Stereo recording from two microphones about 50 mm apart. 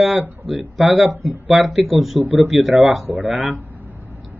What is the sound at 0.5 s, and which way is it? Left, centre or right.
Speech, centre.